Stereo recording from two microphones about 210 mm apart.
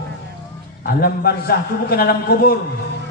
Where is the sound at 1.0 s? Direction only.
45° left (ahead or behind).